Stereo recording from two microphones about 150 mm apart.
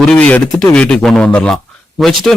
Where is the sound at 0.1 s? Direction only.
10° left (ahead or behind).